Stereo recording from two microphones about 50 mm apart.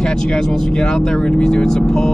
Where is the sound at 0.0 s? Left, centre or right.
Centre.